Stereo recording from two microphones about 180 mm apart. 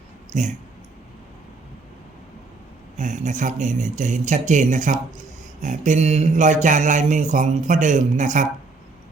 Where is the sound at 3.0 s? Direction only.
45° right (ahead or behind).